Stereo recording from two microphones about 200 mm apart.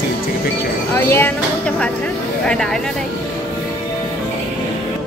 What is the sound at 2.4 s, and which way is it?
Speech, 5° left (ahead or behind).